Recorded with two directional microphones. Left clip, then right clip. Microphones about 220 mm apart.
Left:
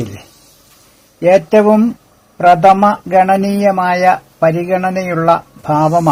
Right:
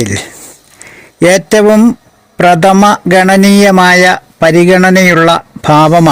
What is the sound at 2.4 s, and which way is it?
Speech, 60° right (ahead or behind).